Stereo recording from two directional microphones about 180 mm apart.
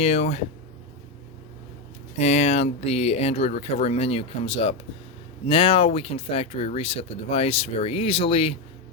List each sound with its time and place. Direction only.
0.0 s speech: 35° left (ahead or behind)
2.1 s speech: 40° left (ahead or behind)